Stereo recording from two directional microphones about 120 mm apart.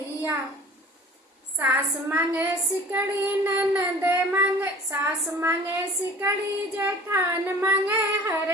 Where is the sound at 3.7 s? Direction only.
15° right (ahead or behind).